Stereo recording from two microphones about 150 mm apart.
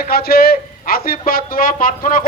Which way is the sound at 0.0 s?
90° left.